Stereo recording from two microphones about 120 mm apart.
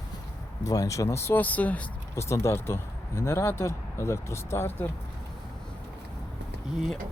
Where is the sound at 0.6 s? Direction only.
30° left (ahead or behind); by 1.9 s 10° left (ahead or behind).